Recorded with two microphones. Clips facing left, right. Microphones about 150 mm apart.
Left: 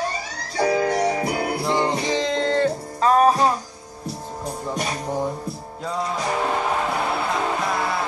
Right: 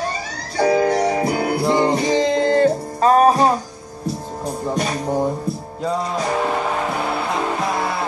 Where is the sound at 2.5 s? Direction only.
45° right (ahead or behind).